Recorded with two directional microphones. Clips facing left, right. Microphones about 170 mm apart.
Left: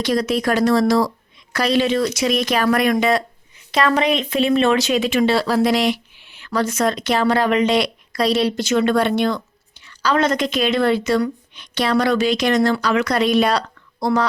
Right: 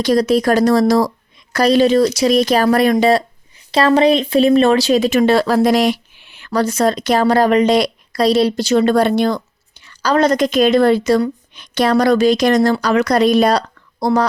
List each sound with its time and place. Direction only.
0.0 s a woman's voice: 40° right (ahead or behind); by 6.5 s 55° right (ahead or behind)
6.5 s a woman's voice: 35° right (ahead or behind)